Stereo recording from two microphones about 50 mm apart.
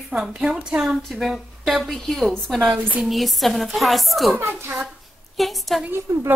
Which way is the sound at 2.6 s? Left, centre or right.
Right.